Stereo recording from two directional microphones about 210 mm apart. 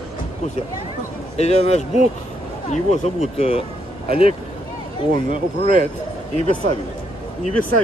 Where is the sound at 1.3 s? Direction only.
30° left (ahead or behind).